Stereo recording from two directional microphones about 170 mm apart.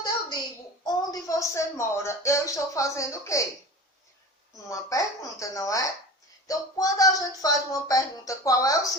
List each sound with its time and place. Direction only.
0.9 s a woman's voice: 20° left (ahead or behind)
4.7 s speech: 20° left (ahead or behind)